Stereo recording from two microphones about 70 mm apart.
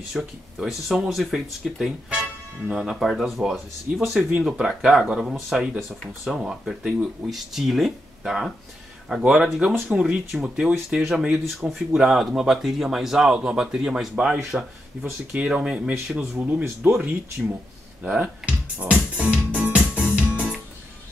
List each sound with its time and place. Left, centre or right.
0.1 s speech: centre
6.8 s speech: centre
7.2 s speech: centre
16.2 s speech: right
18.0 s music: centre